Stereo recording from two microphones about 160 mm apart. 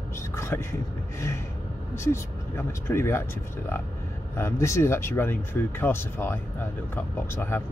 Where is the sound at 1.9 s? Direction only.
15° left (ahead or behind).